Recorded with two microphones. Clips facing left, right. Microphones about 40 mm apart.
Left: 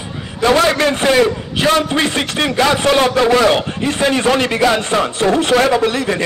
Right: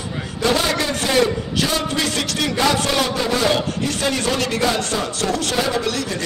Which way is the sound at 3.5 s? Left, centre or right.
Left.